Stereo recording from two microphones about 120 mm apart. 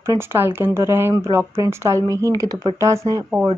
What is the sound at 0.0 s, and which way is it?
Speech, 20° right (ahead or behind).